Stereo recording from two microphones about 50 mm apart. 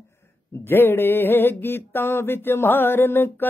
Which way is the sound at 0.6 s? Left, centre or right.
Left.